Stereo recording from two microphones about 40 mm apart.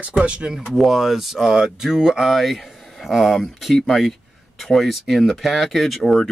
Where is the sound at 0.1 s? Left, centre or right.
Right.